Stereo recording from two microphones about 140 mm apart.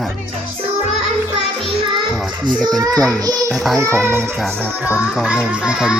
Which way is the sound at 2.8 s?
25° right (ahead or behind).